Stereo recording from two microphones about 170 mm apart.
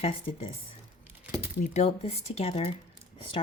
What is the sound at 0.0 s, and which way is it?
Speech, 35° left (ahead or behind).